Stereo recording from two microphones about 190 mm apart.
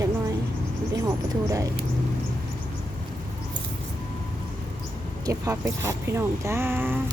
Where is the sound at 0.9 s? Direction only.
20° right (ahead or behind).